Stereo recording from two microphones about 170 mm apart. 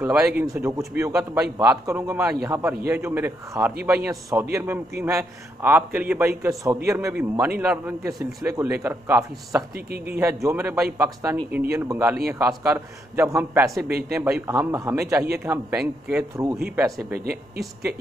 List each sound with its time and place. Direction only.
0.0 s a man's voice: 5° right (ahead or behind)
0.5 s a man's voice: 20° right (ahead or behind)
9.8 s speech: 65° right (ahead or behind)
10.1 s a man's voice: 15° right (ahead or behind)
17.2 s speech: 60° right (ahead or behind)